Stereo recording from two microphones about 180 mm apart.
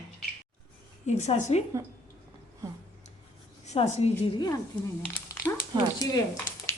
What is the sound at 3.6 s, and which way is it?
A woman's voice, 35° left (ahead or behind).